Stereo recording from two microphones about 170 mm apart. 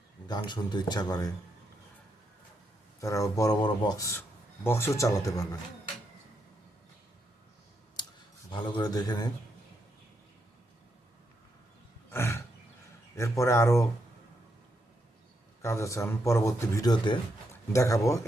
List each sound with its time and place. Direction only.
0.3 s speech: 25° left (ahead or behind)
3.0 s speech: 20° left (ahead or behind)
8.4 s speech: 25° left (ahead or behind)
12.1 s roaring cats: 15° left (ahead or behind)
13.1 s speech: 15° left (ahead or behind)
15.6 s speech: 15° left (ahead or behind)